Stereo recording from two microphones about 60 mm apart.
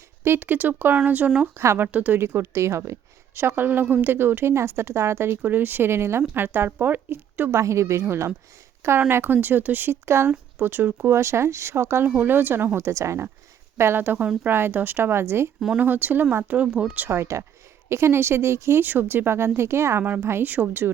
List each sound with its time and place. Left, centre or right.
0.3 s speech: right
1.5 s a woman's voice: right
1.9 s speech: right
2.2 s a woman's voice: right
7.5 s a woman's voice: right
9.0 s speech: right
11.0 s a woman's voice: right
12.0 s speech: right
12.8 s speech: right
14.0 s speech: right
15.8 s speech: right
16.6 s speech: right
17.1 s a woman's voice: right
20.4 s speech: right